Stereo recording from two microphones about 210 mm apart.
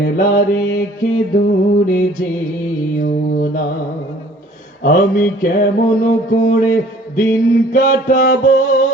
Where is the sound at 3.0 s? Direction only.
40° left (ahead or behind).